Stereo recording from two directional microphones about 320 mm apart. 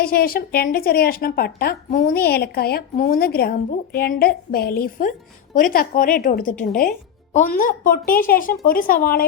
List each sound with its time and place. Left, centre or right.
0.0 s speech: left